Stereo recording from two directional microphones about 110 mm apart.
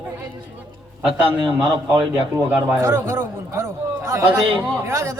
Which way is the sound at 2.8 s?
25° right (ahead or behind).